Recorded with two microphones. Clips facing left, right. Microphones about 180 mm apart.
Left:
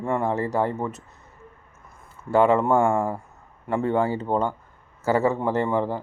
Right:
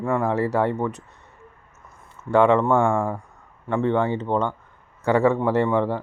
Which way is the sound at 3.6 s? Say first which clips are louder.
Right 1 dB; 40° left (ahead or behind).